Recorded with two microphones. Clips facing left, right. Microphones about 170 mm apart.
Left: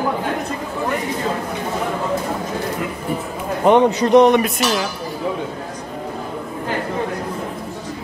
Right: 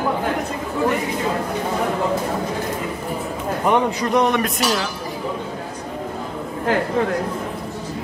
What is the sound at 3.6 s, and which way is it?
Speech, 25° left (ahead or behind).